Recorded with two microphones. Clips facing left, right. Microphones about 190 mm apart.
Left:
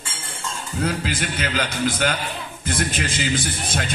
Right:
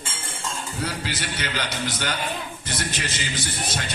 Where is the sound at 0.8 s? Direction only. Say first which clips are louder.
Left 6 dB; 55° left (ahead or behind).